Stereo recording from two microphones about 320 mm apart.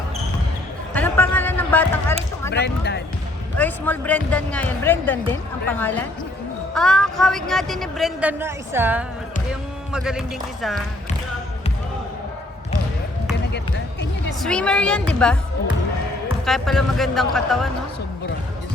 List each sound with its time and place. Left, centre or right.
0.9 s a sound: centre
2.5 s speech: left
3.6 s speech: centre
14.4 s speech: centre
16.5 s speech: centre